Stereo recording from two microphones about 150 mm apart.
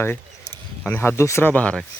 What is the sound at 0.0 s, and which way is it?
Keys jangling, 15° left (ahead or behind).